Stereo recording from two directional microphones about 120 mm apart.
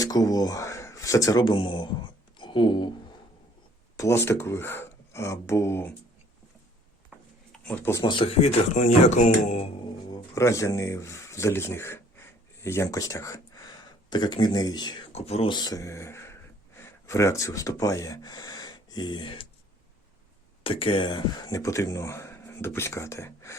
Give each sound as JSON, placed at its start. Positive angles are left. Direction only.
{"t": 0.0, "sound": "speech", "side_deg": 30}
{"t": 3.9, "sound": "speech", "side_deg": 25}
{"t": 7.1, "sound": "a sound", "side_deg": -10}
{"t": 7.5, "sound": "a sound", "side_deg": 10}
{"t": 8.0, "sound": "speech", "side_deg": 45}
{"t": 10.3, "sound": "speech", "side_deg": 25}
{"t": 14.1, "sound": "speech", "side_deg": 40}
{"t": 15.1, "sound": "speech", "side_deg": 60}
{"t": 15.4, "sound": "speech", "side_deg": 35}
{"t": 20.7, "sound": "speech", "side_deg": 50}